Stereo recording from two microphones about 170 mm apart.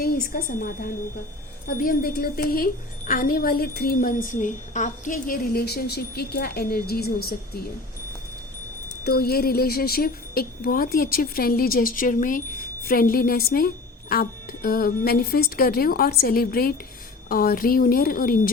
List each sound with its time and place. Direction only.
0.0 s a woman's voice: 60° left (ahead or behind)
9.0 s a woman's voice: 65° left (ahead or behind)